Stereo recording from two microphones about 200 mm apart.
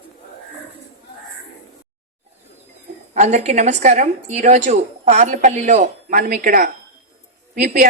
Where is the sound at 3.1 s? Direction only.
35° right (ahead or behind).